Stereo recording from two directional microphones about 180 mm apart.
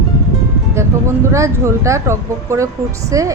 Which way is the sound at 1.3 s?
15° right (ahead or behind).